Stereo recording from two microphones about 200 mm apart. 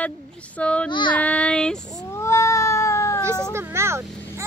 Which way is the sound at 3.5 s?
15° right (ahead or behind).